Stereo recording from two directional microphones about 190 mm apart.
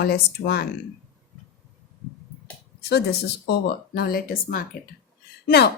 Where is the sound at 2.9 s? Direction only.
60° left (ahead or behind).